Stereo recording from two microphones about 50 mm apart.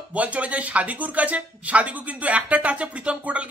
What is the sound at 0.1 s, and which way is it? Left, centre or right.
Speech, right.